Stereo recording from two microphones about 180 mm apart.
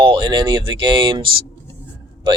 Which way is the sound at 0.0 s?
25° right (ahead or behind).